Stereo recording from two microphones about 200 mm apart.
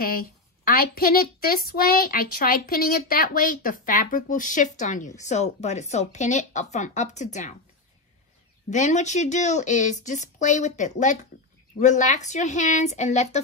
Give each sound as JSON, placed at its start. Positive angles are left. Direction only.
{"t": 0.0, "sound": "a woman's voice", "side_deg": 45}
{"t": 8.6, "sound": "a woman's voice", "side_deg": 35}